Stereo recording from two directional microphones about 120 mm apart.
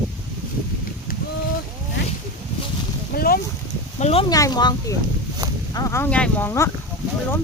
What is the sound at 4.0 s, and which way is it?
Speech, 55° left (ahead or behind).